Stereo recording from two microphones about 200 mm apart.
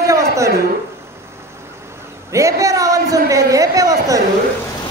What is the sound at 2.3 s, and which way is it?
A man's voice, 15° right (ahead or behind).